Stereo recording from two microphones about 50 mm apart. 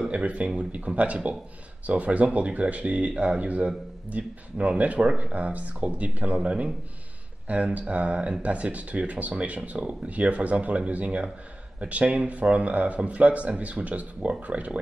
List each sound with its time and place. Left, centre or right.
0.1 s speech: right